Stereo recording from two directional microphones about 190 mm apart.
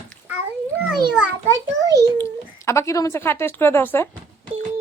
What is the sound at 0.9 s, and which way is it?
Speech, 5° right (ahead or behind).